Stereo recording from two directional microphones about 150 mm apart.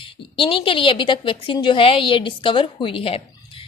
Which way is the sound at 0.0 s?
35° left (ahead or behind).